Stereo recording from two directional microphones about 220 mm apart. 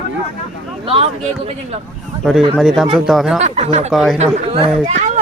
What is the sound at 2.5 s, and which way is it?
Speech, 5° right (ahead or behind).